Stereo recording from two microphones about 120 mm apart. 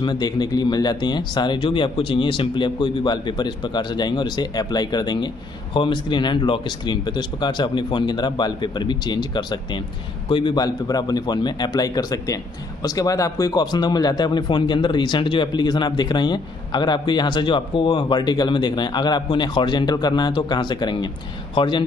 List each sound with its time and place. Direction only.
0.0 s speech: 35° left (ahead or behind)